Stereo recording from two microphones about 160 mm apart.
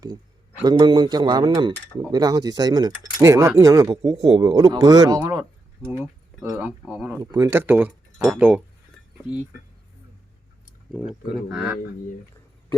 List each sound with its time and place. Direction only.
0.6 s speech: 25° right (ahead or behind); by 8.6 s 5° right (ahead or behind)
10.9 s speech: centre (ahead or behind)